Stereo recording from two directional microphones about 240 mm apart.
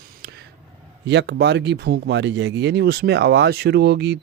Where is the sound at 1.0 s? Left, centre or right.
Right.